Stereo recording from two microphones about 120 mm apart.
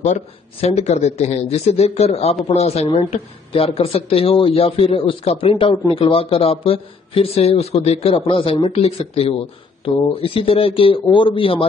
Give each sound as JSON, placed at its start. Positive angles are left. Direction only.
{"t": 0.0, "sound": "speech", "side_deg": 70}